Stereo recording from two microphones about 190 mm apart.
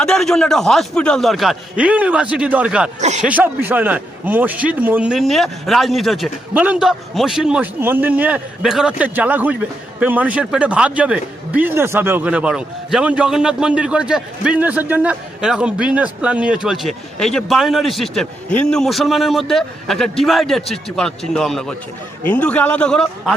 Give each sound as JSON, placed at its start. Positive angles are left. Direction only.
{"t": 0.0, "sound": "a man's voice", "side_deg": 5}
{"t": 3.0, "sound": "speech", "side_deg": -35}
{"t": 3.2, "sound": "a man's voice", "side_deg": -10}